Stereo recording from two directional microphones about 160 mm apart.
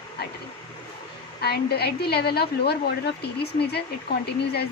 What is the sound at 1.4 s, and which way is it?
A woman's voice, 90° left.